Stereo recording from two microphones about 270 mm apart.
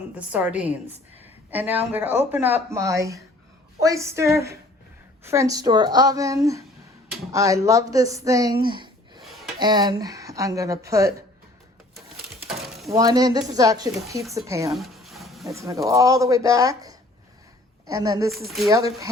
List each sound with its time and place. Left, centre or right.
0.1 s a woman's voice: centre
8.6 s a sound: centre
9.2 s a sound: centre
9.6 s speech: centre
12.5 s mechanisms: centre
12.9 s speech: centre
14.8 s a sound: centre
15.5 s speech: centre
18.3 s a woman's voice: centre
18.7 s speech: centre